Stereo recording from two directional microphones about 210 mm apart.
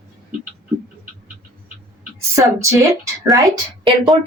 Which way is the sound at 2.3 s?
15° right (ahead or behind).